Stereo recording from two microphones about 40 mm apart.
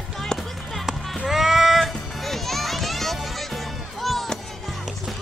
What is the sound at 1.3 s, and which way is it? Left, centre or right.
Child singing, centre.